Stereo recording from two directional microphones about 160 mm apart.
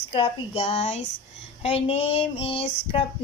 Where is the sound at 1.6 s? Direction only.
35° left (ahead or behind).